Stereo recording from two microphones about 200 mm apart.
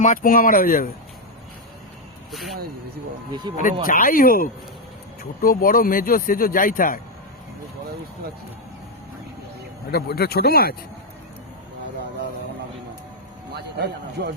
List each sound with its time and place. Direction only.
0.0 s speech: 40° left (ahead or behind)
2.3 s speech: centre (ahead or behind)
3.5 s speech: 20° right (ahead or behind)
3.8 s speech: 45° left (ahead or behind)
9.9 s speech: 50° left (ahead or behind)
13.5 s a man's voice: 55° right (ahead or behind)